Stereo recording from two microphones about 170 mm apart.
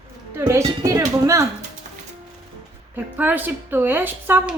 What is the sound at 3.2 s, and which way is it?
Speech, 10° right (ahead or behind).